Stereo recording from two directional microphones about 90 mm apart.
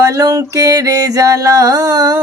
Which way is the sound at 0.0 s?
40° right (ahead or behind).